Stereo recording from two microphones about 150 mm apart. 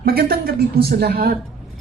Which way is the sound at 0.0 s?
80° right.